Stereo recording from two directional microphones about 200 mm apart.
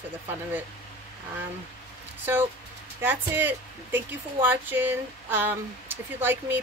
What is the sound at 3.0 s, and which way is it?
Speech, 10° right (ahead or behind).